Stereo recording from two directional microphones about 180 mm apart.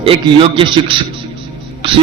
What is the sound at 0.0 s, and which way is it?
A man's voice, 30° right (ahead or behind).